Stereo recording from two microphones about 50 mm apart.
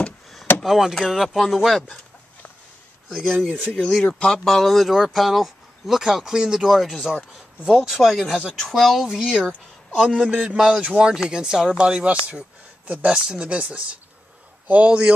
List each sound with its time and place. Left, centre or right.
0.7 s speech: centre
3.1 s speech: centre
8.4 s speech: centre
8.6 s speech: centre; by 12.2 s right
12.3 s a sound: right
13.0 s speech: centre
14.9 s speech: centre